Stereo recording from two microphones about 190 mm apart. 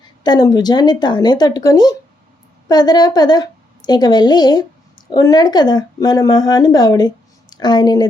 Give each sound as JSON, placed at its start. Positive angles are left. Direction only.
{"t": 0.0, "sound": "a woman's voice", "side_deg": 20}